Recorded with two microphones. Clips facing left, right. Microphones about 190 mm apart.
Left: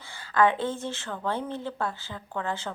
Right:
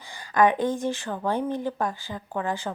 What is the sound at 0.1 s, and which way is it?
A woman's voice, 15° right (ahead or behind).